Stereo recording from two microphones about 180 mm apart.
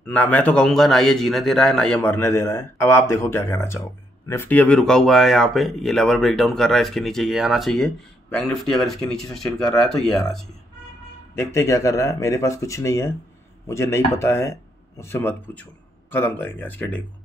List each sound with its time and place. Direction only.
0.0 s a man's voice: 10° left (ahead or behind)
11.3 s a man's voice: 15° left (ahead or behind)